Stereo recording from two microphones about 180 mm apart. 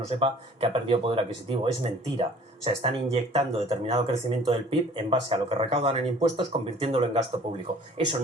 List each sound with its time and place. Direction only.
0.2 s speech: 30° right (ahead or behind)